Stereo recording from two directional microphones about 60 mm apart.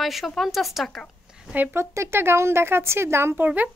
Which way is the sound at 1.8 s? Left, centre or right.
Right.